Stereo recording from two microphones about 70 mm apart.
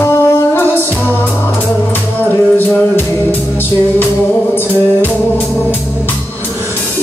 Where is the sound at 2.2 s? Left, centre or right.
Left.